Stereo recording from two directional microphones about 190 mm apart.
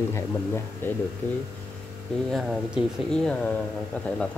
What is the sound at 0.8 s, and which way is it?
Speech, 10° left (ahead or behind).